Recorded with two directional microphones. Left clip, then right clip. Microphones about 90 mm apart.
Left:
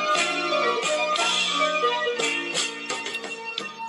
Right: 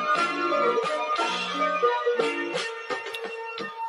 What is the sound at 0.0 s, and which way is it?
Music, 25° left (ahead or behind).